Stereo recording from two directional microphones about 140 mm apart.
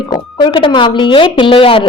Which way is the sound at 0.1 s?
30° left (ahead or behind).